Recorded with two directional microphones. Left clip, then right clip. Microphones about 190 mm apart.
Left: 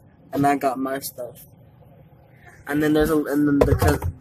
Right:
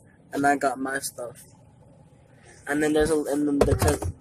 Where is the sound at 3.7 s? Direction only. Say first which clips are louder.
Left 3 dB; 10° right (ahead or behind).